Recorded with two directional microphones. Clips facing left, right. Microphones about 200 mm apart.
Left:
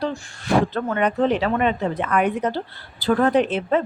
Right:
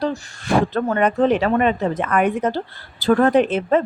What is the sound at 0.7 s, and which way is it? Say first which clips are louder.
A woman's voice: right 3 dB; 45° right (ahead or behind).